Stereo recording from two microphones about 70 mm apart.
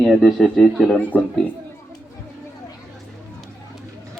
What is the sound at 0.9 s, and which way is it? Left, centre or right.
Speech, left.